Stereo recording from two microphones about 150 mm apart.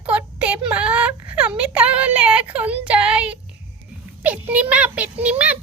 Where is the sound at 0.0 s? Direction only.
10° right (ahead or behind).